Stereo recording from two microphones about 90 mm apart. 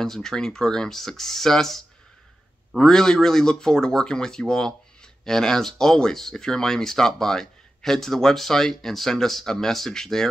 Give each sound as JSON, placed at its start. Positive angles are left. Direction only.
{"t": 0.0, "sound": "speech", "side_deg": 5}